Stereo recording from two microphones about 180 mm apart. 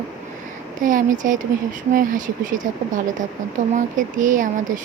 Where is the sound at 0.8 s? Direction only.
45° right (ahead or behind).